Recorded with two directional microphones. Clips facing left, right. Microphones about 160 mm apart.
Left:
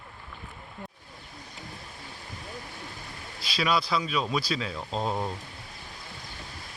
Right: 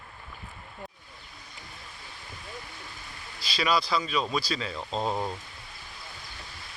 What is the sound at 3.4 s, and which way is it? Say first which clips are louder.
Speech: even; centre (ahead or behind).